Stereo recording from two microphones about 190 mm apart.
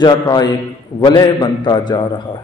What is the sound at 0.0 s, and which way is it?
A man's voice, 20° left (ahead or behind).